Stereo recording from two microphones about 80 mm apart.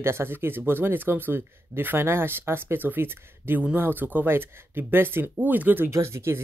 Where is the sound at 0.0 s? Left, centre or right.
Right.